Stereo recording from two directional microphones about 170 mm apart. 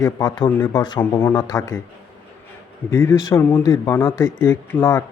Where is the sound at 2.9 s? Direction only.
15° left (ahead or behind).